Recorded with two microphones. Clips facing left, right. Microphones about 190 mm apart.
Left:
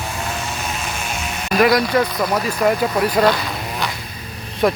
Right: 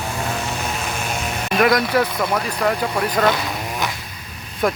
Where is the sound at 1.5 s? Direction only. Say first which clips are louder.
Left 2 dB; centre (ahead or behind).